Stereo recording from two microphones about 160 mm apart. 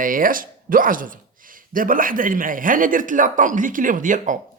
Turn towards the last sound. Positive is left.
turn(degrees=-55)  # may be behind; listen again after turning